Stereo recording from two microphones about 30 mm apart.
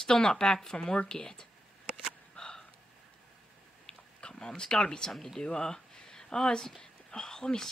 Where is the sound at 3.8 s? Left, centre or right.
Left.